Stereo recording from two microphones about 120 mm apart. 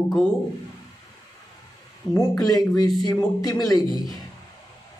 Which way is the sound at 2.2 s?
30° left (ahead or behind).